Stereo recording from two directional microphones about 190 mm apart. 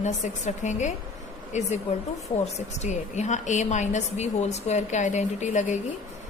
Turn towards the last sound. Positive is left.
turn(degrees=40)  # may be behind; listen again after turning